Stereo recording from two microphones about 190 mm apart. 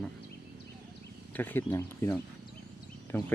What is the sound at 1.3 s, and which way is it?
Speech, 10° left (ahead or behind).